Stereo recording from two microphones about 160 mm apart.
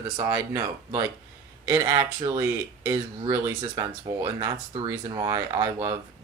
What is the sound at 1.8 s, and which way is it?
Speech, 30° right (ahead or behind).